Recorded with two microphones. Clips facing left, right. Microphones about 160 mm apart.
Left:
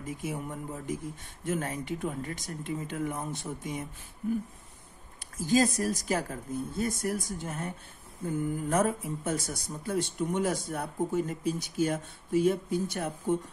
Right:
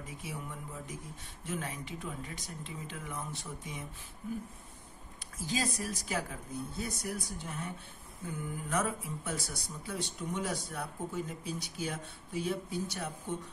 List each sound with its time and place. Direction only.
0.2 s speech: 50° left (ahead or behind)
5.5 s speech: 45° left (ahead or behind)